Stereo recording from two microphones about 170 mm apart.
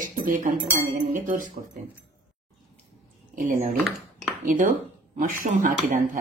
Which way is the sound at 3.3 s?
50° right (ahead or behind).